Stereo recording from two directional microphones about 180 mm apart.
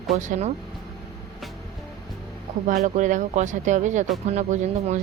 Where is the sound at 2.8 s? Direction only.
45° right (ahead or behind).